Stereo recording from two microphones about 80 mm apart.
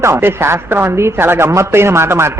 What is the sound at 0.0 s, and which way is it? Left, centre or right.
A woman's voice, right.